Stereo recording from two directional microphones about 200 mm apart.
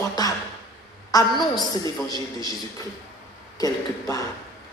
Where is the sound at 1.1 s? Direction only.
15° left (ahead or behind).